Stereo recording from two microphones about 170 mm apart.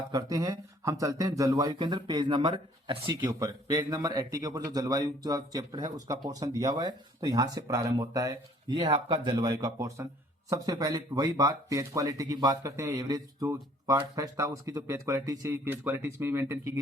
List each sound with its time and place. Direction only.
0.1 s a man's voice: 20° right (ahead or behind)